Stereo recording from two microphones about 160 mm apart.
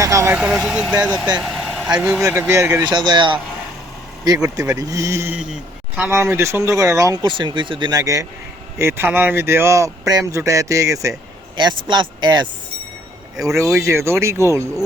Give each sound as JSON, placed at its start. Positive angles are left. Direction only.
{"t": 0.0, "sound": "vehicle", "side_deg": -20}
{"t": 0.3, "sound": "speech", "side_deg": -5}
{"t": 2.5, "sound": "speech", "side_deg": -15}
{"t": 2.8, "sound": "speech", "side_deg": -25}
{"t": 13.7, "sound": "speech", "side_deg": -15}